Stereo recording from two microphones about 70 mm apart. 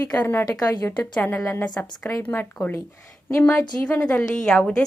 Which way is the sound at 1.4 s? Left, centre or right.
Left.